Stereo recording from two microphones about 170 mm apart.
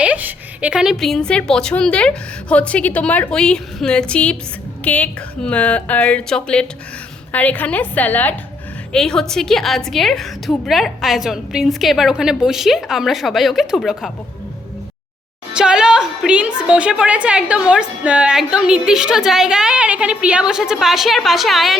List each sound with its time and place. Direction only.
0.0 s a woman's voice: 10° right (ahead or behind)
15.5 s a woman's voice: 5° right (ahead or behind)